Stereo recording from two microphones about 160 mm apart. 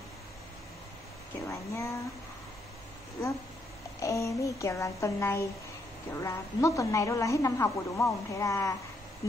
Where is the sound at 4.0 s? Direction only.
20° left (ahead or behind).